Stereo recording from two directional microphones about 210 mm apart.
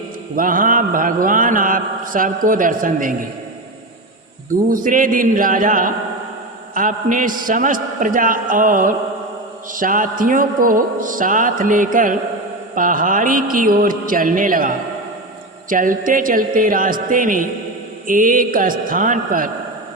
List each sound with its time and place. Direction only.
0.3 s mantra: 40° right (ahead or behind)
4.7 s mantra: 40° right (ahead or behind)